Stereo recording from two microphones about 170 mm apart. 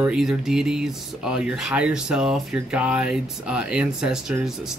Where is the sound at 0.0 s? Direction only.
5° right (ahead or behind).